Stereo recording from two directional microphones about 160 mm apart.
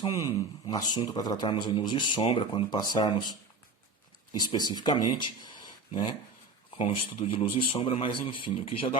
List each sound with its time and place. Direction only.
0.1 s speech: 20° left (ahead or behind)
4.4 s a man's voice: 25° left (ahead or behind)